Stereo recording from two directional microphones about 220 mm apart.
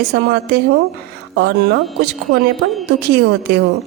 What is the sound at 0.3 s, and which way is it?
Speech, 50° right (ahead or behind).